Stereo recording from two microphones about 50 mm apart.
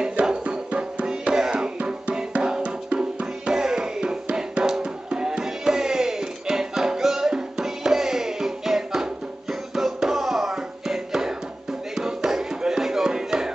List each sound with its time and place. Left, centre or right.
0.1 s music: right
1.0 s music: centre
11.9 s a sound: centre